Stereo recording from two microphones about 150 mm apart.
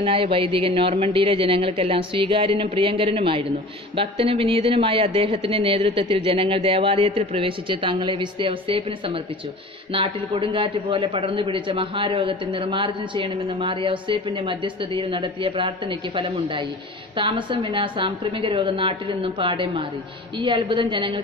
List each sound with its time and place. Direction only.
0.0 s a man's voice: 35° right (ahead or behind)
17.2 s a man's voice: 35° right (ahead or behind)